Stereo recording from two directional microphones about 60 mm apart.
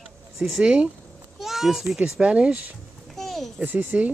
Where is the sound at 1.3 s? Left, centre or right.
Centre.